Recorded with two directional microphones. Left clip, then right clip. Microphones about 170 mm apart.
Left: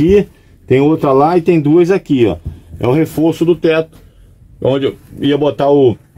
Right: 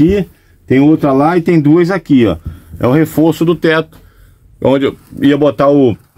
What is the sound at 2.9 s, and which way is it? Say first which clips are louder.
Speech: right 2 dB; 70° right (ahead or behind).